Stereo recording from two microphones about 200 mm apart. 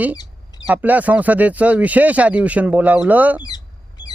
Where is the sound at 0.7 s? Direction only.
10° right (ahead or behind).